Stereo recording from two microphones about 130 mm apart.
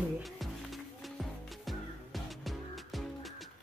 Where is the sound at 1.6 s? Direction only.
Centre (ahead or behind).